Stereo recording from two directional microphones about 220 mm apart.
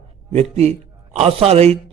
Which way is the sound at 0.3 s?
30° right (ahead or behind).